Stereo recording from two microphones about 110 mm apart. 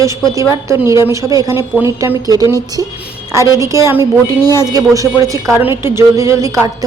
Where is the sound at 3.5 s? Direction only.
30° right (ahead or behind).